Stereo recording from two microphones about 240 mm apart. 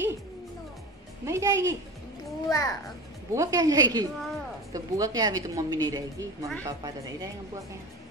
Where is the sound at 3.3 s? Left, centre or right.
Centre.